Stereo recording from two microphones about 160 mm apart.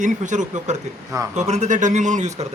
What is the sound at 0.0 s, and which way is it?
Speech, 50° right (ahead or behind).